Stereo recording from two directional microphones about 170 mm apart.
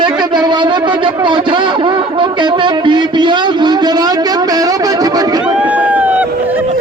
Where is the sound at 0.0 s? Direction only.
25° right (ahead or behind).